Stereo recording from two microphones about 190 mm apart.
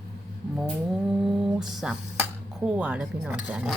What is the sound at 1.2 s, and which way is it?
Speech, centre (ahead or behind).